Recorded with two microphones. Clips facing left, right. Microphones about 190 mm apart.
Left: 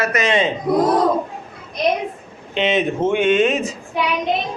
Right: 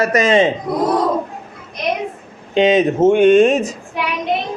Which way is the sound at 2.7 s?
45° right (ahead or behind).